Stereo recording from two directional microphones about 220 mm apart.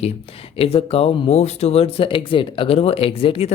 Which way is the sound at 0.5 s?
25° left (ahead or behind).